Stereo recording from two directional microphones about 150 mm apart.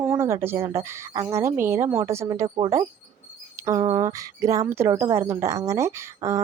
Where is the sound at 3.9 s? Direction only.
20° right (ahead or behind).